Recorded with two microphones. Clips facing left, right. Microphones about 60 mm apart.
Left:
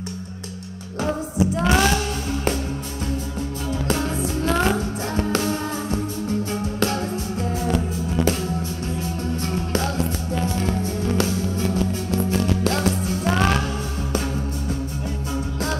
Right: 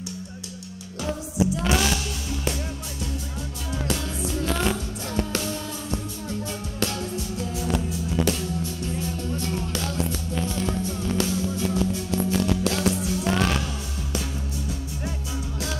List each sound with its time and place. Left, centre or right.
1.0 s music: left
3.8 s music: left